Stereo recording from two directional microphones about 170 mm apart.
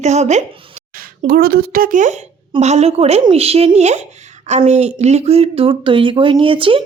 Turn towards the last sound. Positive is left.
turn(degrees=-30)  # may be behind; listen again after turning